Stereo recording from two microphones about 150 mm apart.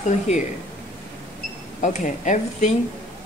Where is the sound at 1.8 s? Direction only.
55° left (ahead or behind).